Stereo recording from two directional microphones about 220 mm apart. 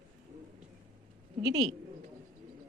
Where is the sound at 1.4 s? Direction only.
15° right (ahead or behind).